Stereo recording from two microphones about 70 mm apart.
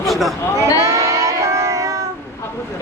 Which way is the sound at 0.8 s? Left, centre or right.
Right.